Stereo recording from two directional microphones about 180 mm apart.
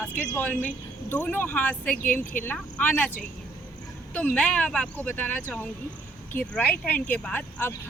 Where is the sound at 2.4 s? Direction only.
10° left (ahead or behind).